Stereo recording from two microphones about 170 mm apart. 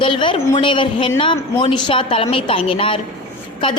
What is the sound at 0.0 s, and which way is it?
A woman's voice, 30° left (ahead or behind).